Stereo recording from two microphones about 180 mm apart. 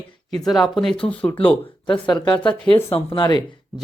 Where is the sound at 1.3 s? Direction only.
30° left (ahead or behind).